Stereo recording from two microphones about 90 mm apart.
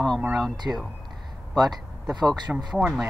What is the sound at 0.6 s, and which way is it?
Speech, 20° right (ahead or behind).